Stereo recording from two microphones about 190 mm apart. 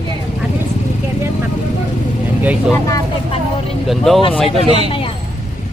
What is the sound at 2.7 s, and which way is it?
Speech, 15° left (ahead or behind).